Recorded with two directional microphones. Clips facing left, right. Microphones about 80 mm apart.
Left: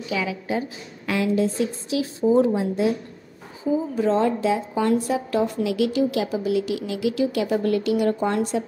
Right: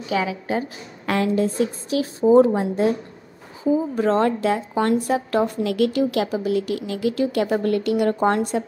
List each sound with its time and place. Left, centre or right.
0.1 s a woman's voice: right
3.9 s a woman's voice: right